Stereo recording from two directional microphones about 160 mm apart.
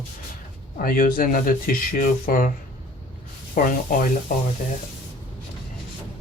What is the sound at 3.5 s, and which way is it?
Speech, 60° left (ahead or behind).